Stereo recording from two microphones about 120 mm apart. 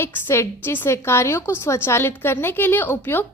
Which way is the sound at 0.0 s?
20° left (ahead or behind).